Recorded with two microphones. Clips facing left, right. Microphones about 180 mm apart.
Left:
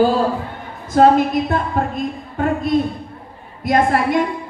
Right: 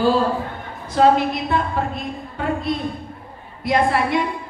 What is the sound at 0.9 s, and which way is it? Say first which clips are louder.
Speech: left 3 dB; 45° left (ahead or behind).